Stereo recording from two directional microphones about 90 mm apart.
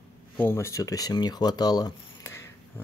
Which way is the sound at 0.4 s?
25° left (ahead or behind).